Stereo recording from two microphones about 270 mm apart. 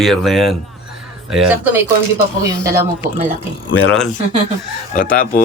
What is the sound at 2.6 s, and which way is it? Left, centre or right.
Speech, right.